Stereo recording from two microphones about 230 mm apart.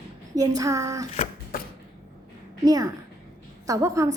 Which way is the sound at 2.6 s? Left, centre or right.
Centre.